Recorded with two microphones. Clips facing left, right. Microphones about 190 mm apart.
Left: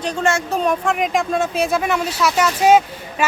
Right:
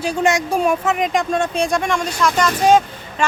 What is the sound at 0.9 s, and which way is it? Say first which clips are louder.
Speech: even; centre (ahead or behind).